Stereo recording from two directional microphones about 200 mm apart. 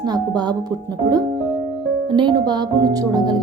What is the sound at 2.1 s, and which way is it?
Speech, 20° right (ahead or behind).